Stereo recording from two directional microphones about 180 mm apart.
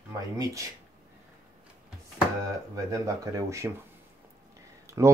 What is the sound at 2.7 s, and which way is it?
Speech, 20° right (ahead or behind).